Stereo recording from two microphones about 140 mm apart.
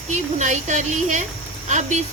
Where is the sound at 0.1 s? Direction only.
55° right (ahead or behind).